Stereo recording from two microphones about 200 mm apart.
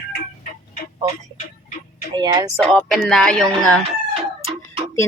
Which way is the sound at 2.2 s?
20° right (ahead or behind).